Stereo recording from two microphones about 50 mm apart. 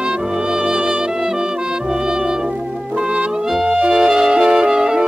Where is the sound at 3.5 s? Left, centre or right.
Centre.